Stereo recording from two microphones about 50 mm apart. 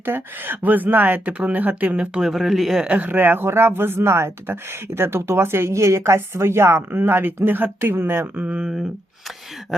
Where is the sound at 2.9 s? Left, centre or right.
Right.